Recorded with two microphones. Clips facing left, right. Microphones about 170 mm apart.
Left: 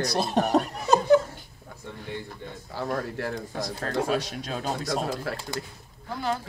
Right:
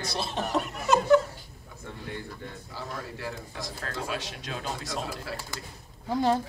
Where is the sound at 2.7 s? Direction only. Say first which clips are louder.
Left 10 dB; 55° left (ahead or behind).